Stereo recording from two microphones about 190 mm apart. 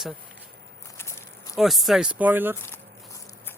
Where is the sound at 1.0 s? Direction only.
15° left (ahead or behind).